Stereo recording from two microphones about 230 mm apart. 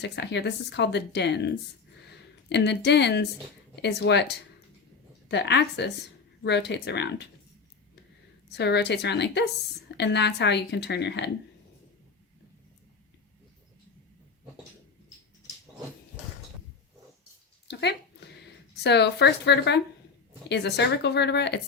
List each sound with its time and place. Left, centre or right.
0.0 s speech: left
8.4 s speech: left
17.7 s a sound: left
18.8 s speech: left